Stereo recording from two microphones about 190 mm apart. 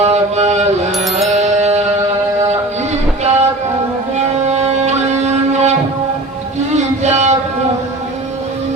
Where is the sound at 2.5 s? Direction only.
35° right (ahead or behind).